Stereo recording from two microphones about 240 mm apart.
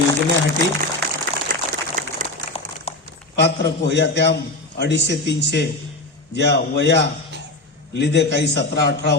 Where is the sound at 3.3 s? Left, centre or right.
Left.